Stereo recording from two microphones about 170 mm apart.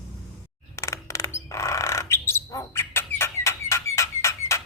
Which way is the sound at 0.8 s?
15° left (ahead or behind).